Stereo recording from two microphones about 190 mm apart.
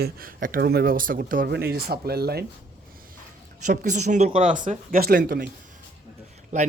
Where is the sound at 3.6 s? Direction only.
40° right (ahead or behind).